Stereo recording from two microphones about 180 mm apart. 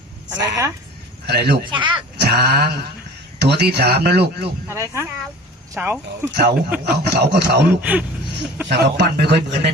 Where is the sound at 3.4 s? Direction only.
70° right (ahead or behind).